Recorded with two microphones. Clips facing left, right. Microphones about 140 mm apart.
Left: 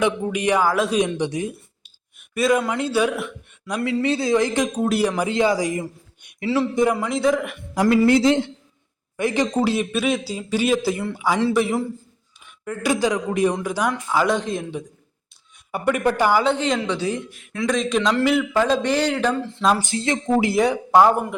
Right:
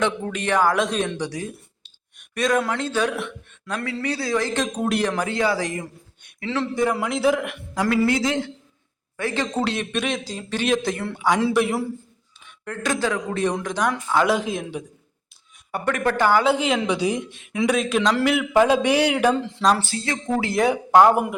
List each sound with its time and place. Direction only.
0.0 s a man's voice: 10° left (ahead or behind)
1.5 s a man's voice: 10° left (ahead or behind)
4.8 s a man's voice: 5° left (ahead or behind)
6.9 s a man's voice: 5° right (ahead or behind)
7.8 s speech: 20° left (ahead or behind)
9.1 s a man's voice: 15° left (ahead or behind)
11.3 s a man's voice: 10° right (ahead or behind)
12.6 s a man's voice: 10° left (ahead or behind)
15.7 s a man's voice: 10° left (ahead or behind)
16.4 s speech: 5° right (ahead or behind); by 17.7 s 20° right (ahead or behind)
17.7 s a man's voice: 5° right (ahead or behind)
19.8 s speech: 20° left (ahead or behind)
20.5 s a man's voice: centre (ahead or behind)